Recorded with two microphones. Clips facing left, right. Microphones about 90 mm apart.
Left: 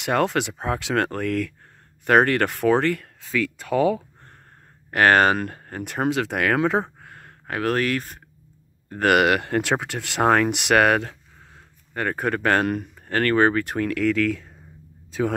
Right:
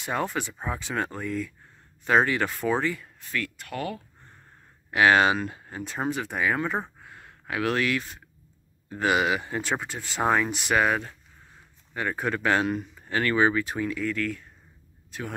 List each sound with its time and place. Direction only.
0.0 s speech: 80° left
4.9 s speech: 50° left (ahead or behind); by 6.9 s 90° left
7.0 s a sound: 55° left (ahead or behind)
8.8 s speech: 55° left (ahead or behind); by 11.6 s 85° left
11.9 s speech: 55° left (ahead or behind); by 14.5 s 90° left